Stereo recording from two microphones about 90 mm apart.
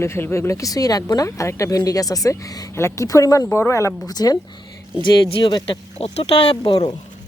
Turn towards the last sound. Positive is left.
turn(degrees=85)